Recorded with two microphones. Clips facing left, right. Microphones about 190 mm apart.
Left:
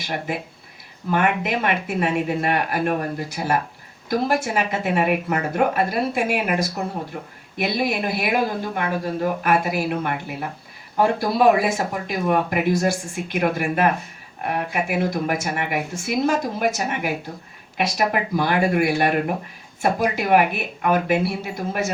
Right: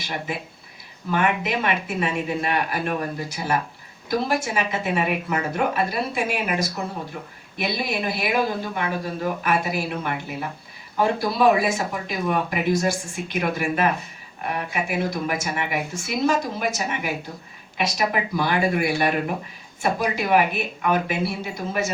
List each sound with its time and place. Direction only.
0.0 s speech: 55° left (ahead or behind)